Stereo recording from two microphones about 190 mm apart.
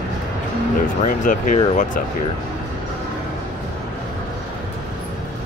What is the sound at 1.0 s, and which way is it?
Speech, 45° left (ahead or behind).